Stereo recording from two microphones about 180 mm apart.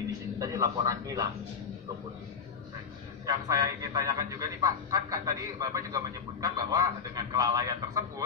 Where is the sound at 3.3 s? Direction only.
20° right (ahead or behind).